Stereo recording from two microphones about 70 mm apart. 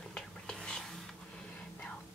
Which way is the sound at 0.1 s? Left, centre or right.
Centre.